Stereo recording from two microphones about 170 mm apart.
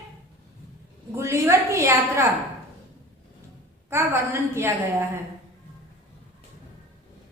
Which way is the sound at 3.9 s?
15° right (ahead or behind).